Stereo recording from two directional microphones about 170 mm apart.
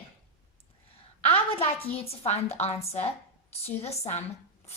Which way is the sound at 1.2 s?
35° left (ahead or behind).